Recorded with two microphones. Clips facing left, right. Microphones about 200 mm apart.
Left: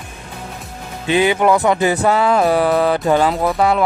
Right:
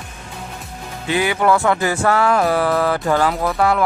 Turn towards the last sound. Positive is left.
turn(degrees=20)  # may be behind; listen again after turning